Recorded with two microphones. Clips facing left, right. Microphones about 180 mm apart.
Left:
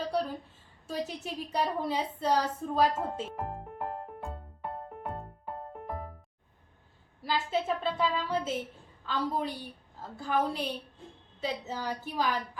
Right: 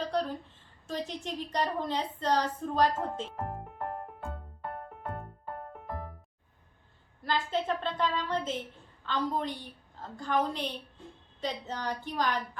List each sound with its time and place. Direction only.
0.0 s a sound: 10° left (ahead or behind)
0.9 s a woman's voice: 10° left (ahead or behind)
5.5 s music: 20° left (ahead or behind)
5.7 s music: 5° left (ahead or behind)
7.2 s a woman's voice: 10° left (ahead or behind)